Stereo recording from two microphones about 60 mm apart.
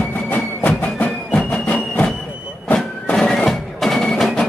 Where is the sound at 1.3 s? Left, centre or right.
Centre.